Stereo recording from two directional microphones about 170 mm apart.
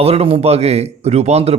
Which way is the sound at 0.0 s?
35° right (ahead or behind).